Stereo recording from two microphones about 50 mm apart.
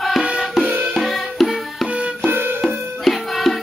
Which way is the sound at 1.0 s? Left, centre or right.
Centre.